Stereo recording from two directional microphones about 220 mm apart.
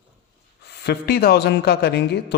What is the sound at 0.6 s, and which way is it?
Speech, 50° left (ahead or behind).